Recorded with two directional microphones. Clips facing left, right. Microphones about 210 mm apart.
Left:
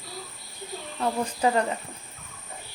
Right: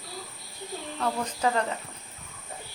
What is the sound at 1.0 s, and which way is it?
Speech, 15° left (ahead or behind).